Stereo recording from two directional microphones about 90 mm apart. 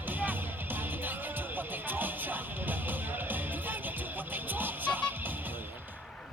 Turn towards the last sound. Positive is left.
turn(degrees=-20)  # may be behind; listen again after turning